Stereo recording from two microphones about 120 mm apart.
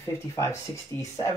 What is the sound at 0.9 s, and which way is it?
Speech, 40° right (ahead or behind).